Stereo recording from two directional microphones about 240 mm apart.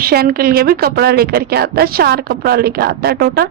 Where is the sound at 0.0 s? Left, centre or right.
Right.